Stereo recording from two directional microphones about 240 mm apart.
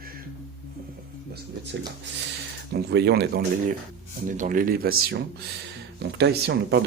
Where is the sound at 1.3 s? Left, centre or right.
Right.